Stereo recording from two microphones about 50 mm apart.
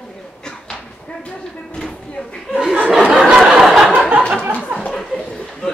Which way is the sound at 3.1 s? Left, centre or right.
Centre.